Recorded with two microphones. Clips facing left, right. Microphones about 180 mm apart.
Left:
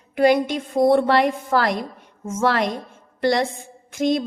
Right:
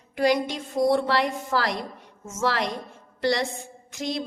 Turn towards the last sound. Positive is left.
turn(degrees=50)  # may be behind; listen again after turning